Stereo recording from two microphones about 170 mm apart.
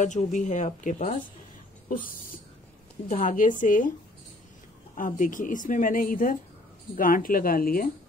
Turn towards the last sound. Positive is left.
turn(degrees=55)  # may be behind; listen again after turning